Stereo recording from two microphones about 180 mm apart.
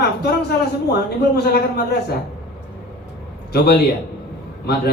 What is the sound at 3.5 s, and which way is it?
Speech, 65° left (ahead or behind).